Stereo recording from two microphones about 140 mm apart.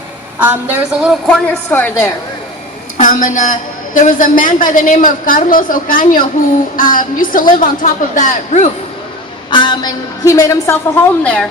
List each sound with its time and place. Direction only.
0.3 s a woman's voice: 15° right (ahead or behind)
1.1 s a woman's voice: 5° left (ahead or behind)
3.0 s a man's voice: 65° left (ahead or behind)
9.5 s a woman's voice: 35° left (ahead or behind); by 11.4 s 10° left (ahead or behind)